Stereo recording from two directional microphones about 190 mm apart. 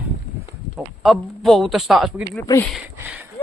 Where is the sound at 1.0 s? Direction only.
Centre (ahead or behind).